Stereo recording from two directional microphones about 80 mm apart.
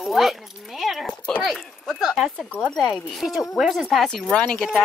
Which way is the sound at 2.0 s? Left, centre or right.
Centre.